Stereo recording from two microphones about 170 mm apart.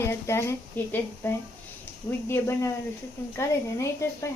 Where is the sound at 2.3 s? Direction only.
15° left (ahead or behind).